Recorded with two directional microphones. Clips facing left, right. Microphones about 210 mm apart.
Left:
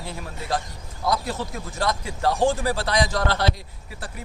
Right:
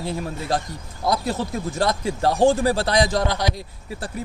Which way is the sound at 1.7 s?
30° right (ahead or behind).